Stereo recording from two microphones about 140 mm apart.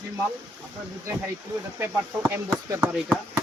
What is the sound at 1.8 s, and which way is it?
Speech, 15° right (ahead or behind).